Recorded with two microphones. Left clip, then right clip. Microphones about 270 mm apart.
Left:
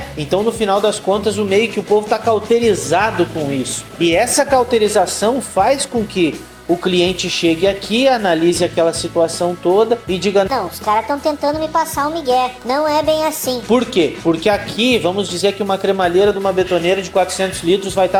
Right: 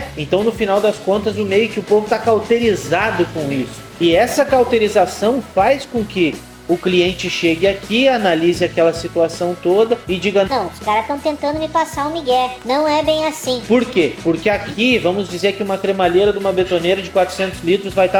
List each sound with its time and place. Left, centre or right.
0.3 s speech: left